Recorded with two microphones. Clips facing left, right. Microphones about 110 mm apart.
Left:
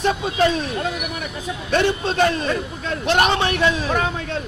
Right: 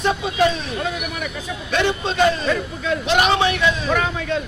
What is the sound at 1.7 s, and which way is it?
Speech, 50° left (ahead or behind).